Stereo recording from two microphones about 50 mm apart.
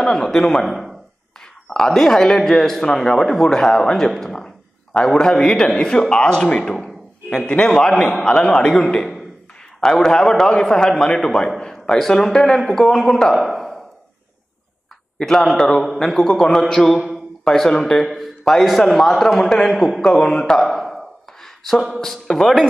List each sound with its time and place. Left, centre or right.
0.0 s a man's voice: centre
8.1 s a man's voice: centre
15.2 s a man's voice: centre
20.6 s a sound: centre
22.0 s a man's voice: centre